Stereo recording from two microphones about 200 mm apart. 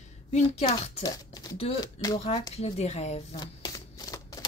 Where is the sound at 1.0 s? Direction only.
20° left (ahead or behind).